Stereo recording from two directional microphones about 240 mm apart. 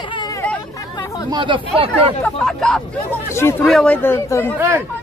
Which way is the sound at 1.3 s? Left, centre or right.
Centre.